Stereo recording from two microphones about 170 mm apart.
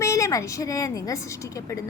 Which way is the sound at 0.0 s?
20° left (ahead or behind).